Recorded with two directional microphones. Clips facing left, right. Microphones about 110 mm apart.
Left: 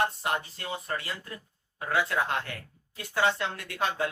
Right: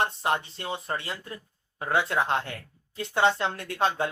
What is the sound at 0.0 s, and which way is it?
Speech, 25° right (ahead or behind).